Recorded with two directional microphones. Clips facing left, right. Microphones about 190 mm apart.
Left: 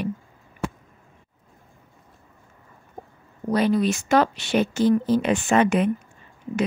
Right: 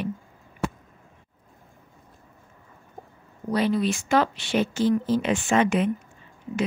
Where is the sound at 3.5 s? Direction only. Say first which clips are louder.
Left 3 dB; 45° left (ahead or behind).